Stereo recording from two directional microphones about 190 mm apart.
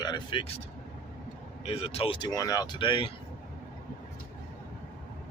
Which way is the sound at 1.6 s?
30° left (ahead or behind).